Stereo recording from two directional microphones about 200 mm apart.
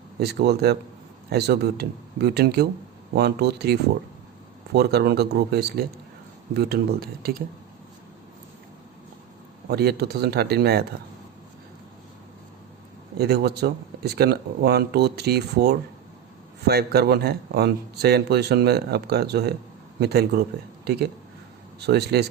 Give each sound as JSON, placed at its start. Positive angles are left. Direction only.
{"t": 0.2, "sound": "speech", "side_deg": -55}
{"t": 9.6, "sound": "speech", "side_deg": -55}
{"t": 13.1, "sound": "speech", "side_deg": -55}